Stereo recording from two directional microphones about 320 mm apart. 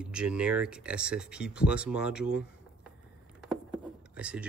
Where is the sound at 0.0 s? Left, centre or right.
Centre.